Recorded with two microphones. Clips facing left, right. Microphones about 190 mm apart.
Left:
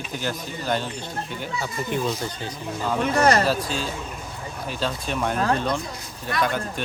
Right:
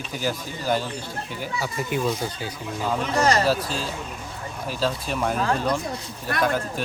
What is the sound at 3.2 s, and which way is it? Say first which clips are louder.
Speech: left 2 dB; 55° left (ahead or behind).